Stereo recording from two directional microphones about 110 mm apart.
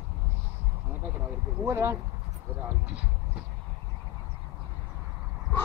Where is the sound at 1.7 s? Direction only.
25° right (ahead or behind).